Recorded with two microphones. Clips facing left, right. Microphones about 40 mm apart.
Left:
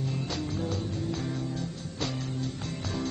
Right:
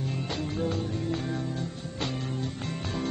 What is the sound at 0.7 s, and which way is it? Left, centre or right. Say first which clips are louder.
Music: right 2 dB; right.